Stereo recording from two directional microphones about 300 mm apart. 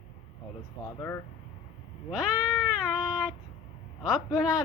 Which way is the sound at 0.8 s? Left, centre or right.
Centre.